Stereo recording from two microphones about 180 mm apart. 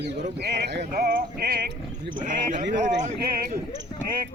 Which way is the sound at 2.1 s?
45° right (ahead or behind).